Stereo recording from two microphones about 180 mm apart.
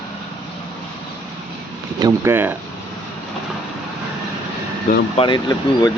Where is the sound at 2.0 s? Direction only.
15° right (ahead or behind).